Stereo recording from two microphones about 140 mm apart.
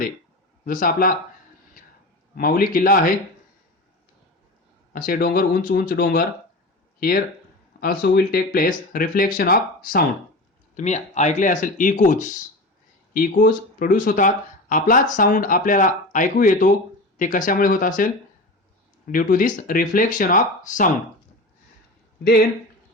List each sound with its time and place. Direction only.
0.6 s speech: 80° left
2.3 s speech: 90° left
4.9 s speech: 90° left
7.8 s speech: 90° left
10.8 s speech: 55° left (ahead or behind)
13.1 s speech: 85° left; by 20.9 s 70° left (ahead or behind)